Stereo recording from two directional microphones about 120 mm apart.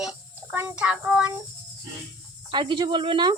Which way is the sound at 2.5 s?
40° right (ahead or behind).